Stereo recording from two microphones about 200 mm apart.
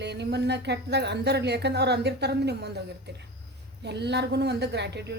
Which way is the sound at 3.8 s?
55° right (ahead or behind).